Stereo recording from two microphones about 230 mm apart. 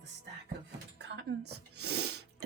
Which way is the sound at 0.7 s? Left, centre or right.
Right.